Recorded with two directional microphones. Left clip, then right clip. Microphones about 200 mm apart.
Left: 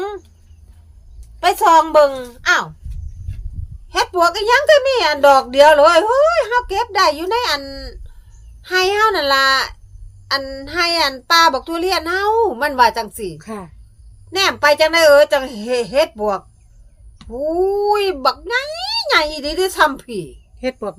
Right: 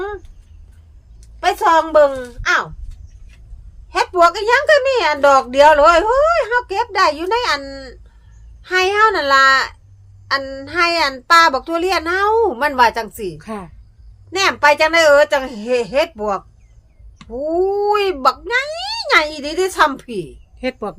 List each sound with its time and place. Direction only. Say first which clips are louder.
1.4 s a woman's voice: left 2 dB; 10° left (ahead or behind)
3.8 s speech: right 2 dB; centre (ahead or behind)